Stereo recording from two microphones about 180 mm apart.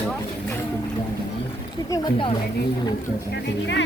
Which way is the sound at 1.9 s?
25° left (ahead or behind).